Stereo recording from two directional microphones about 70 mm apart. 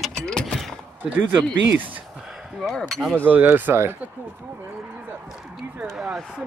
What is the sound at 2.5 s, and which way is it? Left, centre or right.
Speech, centre.